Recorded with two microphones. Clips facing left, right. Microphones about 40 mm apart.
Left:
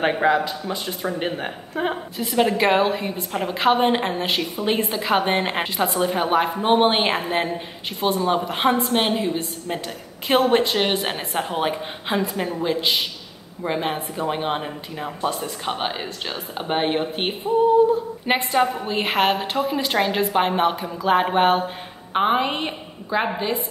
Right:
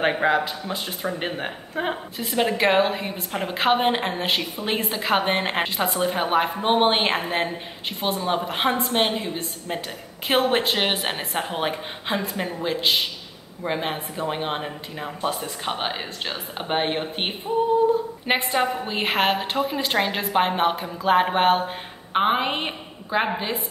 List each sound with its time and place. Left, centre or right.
0.0 s a woman's voice: centre
10.2 s a woman's voice: centre